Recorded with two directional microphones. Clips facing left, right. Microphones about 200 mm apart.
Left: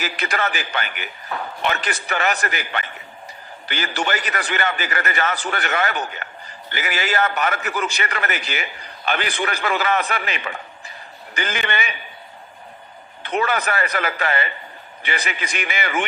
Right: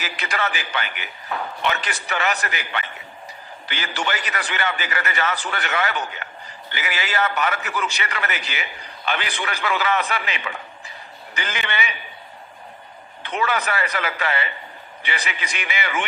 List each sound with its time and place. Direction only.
0.0 s a man's voice: 45° left (ahead or behind)
13.2 s a man's voice: 45° left (ahead or behind)